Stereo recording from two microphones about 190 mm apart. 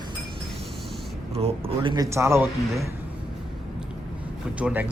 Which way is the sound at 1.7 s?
25° right (ahead or behind).